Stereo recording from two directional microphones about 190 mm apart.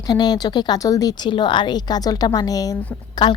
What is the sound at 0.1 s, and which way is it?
A woman's voice, 20° left (ahead or behind).